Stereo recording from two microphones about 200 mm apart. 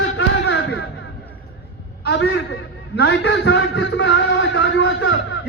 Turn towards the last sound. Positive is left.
turn(degrees=60)  # may be behind; listen again after turning